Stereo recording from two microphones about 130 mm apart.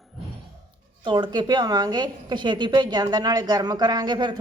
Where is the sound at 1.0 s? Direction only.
35° right (ahead or behind).